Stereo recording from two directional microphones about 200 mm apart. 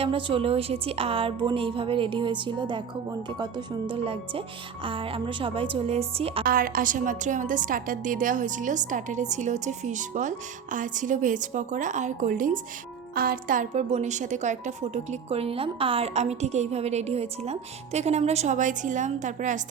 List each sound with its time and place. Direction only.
0.0 s a woman's voice: 25° right (ahead or behind)
6.4 s a woman's voice: 45° right (ahead or behind)